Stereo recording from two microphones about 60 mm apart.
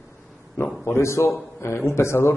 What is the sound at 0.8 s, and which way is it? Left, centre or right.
A man's voice, left.